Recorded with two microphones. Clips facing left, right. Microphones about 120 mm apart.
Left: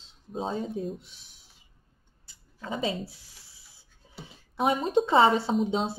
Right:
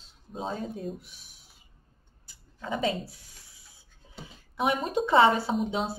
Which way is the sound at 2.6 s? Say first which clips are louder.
Right 2 dB; 15° left (ahead or behind).